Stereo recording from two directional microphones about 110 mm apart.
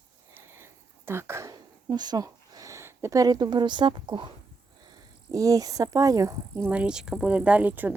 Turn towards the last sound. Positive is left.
turn(degrees=-15)  # may be behind; listen again after turning